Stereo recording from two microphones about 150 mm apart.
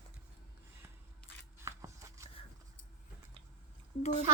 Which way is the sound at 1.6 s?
20° right (ahead or behind).